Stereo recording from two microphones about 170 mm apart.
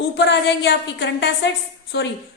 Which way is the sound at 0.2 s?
90° left.